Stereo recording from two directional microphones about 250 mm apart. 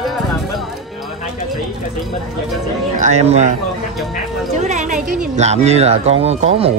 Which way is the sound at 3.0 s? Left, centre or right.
Right.